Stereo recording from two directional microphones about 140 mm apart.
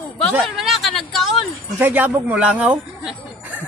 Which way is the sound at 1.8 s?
10° right (ahead or behind).